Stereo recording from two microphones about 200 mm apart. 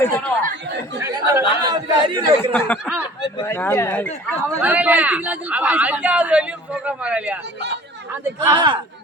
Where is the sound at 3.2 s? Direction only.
20° left (ahead or behind).